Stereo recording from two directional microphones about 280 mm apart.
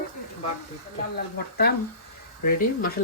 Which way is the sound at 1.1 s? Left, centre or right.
Left.